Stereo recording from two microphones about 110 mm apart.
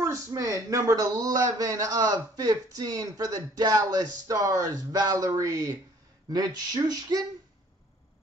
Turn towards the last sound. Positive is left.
turn(degrees=-35)  # may be behind; listen again after turning